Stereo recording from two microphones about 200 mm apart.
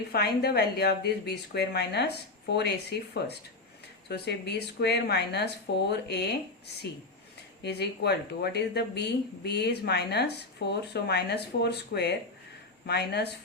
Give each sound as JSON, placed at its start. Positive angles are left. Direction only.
{"t": 0.1, "sound": "speech", "side_deg": 50}
{"t": 7.6, "sound": "speech", "side_deg": 55}